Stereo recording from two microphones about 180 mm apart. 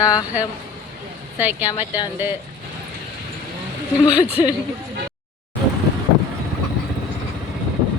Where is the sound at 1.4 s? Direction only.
10° right (ahead or behind).